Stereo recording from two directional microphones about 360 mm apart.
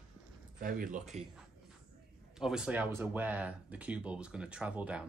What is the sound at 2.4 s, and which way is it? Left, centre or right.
Speech, centre.